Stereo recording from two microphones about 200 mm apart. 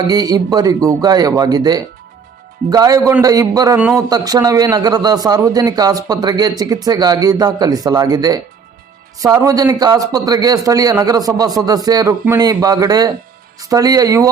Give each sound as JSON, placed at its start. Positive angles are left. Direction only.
{"t": 0.1, "sound": "a man's voice", "side_deg": -20}
{"t": 3.8, "sound": "a man's voice", "side_deg": -5}
{"t": 4.1, "sound": "a man's voice", "side_deg": -20}